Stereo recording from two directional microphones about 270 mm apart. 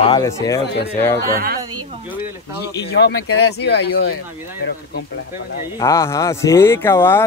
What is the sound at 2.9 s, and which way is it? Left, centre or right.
Speech, left.